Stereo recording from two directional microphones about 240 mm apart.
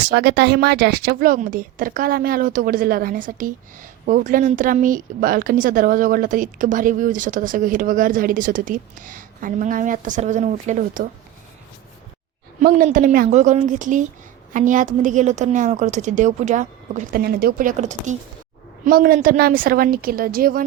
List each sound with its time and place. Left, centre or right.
0.1 s speech: right
12.6 s speech: right